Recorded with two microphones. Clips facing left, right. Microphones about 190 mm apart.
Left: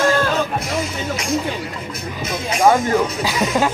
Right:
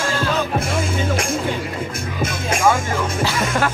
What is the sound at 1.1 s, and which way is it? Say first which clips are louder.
Speech: left 1 dB; 50° right (ahead or behind).